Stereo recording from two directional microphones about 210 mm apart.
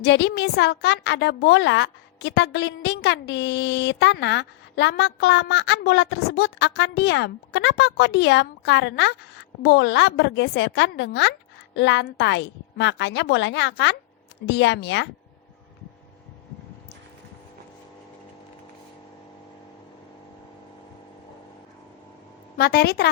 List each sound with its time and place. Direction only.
0.0 s a woman's voice: 55° left (ahead or behind)
22.5 s a woman's voice: 50° left (ahead or behind)